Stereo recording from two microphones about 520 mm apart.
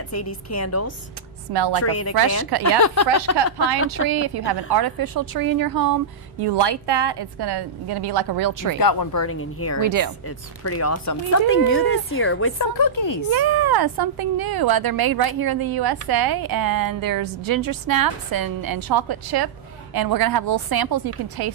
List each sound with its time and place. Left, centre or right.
0.1 s speech: left
4.1 s a woman's voice: right
8.7 s speech: left
9.8 s a woman's voice: right
10.2 s speech: left
12.7 s speech: left
13.3 s speech: right